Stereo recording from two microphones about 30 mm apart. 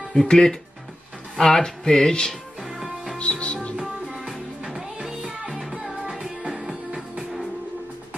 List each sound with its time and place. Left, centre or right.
0.1 s music: centre
3.2 s music: left
3.8 s music: centre
6.0 s music: right